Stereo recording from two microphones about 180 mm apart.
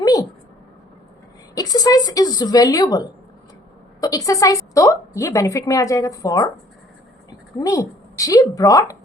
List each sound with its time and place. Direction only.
0.0 s a sound: 20° left (ahead or behind)
1.5 s a woman's voice: 20° left (ahead or behind)
7.6 s a woman's voice: 20° left (ahead or behind)